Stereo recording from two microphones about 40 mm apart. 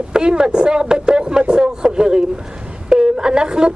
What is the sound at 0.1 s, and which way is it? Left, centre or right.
Speech, right.